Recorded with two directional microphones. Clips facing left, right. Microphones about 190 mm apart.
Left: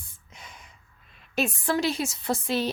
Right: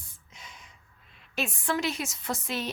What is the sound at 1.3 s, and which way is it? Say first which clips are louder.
Speech: left 4 dB; 35° left (ahead or behind).